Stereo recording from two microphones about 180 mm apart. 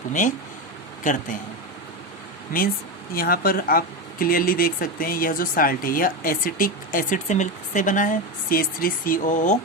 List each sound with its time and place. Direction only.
0.1 s speech: 45° left (ahead or behind)
3.2 s speech: 55° left (ahead or behind)